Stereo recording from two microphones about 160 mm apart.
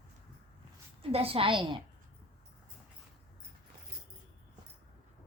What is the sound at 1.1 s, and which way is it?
Speech, 35° right (ahead or behind).